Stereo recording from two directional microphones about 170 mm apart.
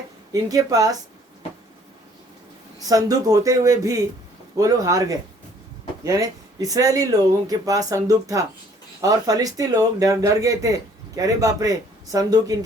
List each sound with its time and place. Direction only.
0.4 s speech: 20° right (ahead or behind)
2.8 s speech: 20° right (ahead or behind)